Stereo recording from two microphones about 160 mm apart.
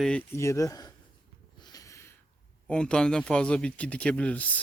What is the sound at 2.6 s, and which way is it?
A man's voice, 5° left (ahead or behind).